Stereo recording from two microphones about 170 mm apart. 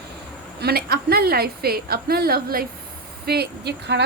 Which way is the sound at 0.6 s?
65° right (ahead or behind).